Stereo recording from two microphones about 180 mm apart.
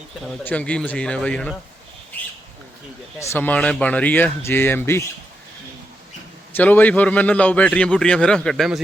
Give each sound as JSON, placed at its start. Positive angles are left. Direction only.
{"t": 0.4, "sound": "a man's voice", "side_deg": 5}
{"t": 3.2, "sound": "a man's voice", "side_deg": 15}
{"t": 6.5, "sound": "a man's voice", "side_deg": 10}